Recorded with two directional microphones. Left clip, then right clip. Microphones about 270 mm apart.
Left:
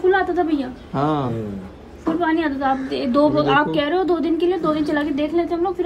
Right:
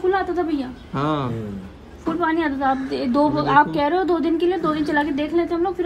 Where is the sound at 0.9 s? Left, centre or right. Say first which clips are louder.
Left 2 dB; centre.